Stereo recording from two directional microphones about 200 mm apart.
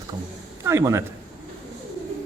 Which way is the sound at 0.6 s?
15° right (ahead or behind).